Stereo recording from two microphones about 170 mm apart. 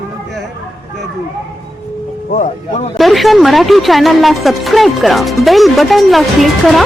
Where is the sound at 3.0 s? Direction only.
Centre (ahead or behind).